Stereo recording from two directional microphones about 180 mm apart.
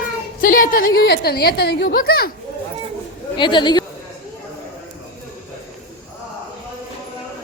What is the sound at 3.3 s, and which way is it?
Speech, 25° left (ahead or behind).